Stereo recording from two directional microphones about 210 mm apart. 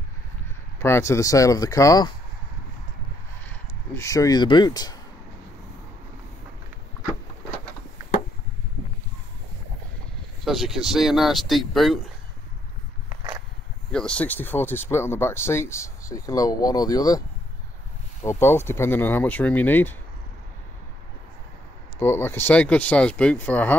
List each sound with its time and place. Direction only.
0.7 s speech: 10° left (ahead or behind)
3.4 s speech: 15° left (ahead or behind)
10.4 s speech: centre (ahead or behind)
13.1 s a sound: 15° right (ahead or behind)
13.9 s speech: 5° left (ahead or behind)
18.2 s speech: 10° left (ahead or behind)
22.0 s speech: 10° left (ahead or behind)